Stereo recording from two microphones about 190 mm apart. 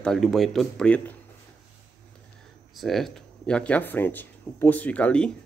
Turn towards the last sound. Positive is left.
turn(degrees=5)  # may be behind; listen again after turning